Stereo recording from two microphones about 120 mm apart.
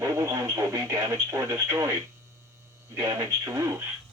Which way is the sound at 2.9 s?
25° right (ahead or behind).